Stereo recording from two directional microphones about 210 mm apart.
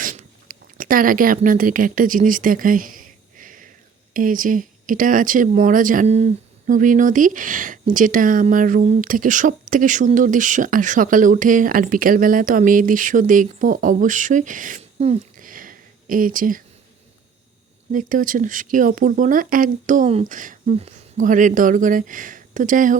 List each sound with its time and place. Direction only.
0.0 s a sound: 40° right (ahead or behind)
4.1 s speech: 40° right (ahead or behind)
17.9 s speech: 40° right (ahead or behind)